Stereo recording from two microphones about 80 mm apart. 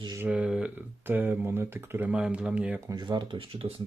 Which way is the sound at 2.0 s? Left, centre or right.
Centre.